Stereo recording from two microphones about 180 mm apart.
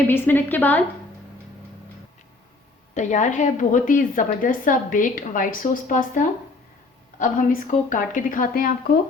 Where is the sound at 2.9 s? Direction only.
40° left (ahead or behind).